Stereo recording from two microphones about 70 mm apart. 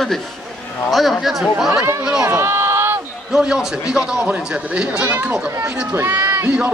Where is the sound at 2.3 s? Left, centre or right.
Right.